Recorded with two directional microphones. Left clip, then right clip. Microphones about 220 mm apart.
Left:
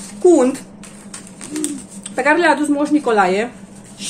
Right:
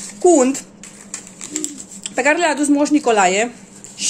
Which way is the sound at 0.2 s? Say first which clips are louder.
Left 1 dB; 35° right (ahead or behind).